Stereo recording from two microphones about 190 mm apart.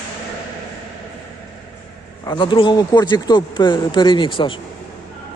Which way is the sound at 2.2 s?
25° left (ahead or behind).